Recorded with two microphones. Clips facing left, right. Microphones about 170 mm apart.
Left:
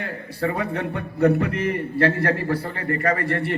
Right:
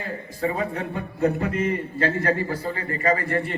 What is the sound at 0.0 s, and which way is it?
A man's voice, 70° left (ahead or behind).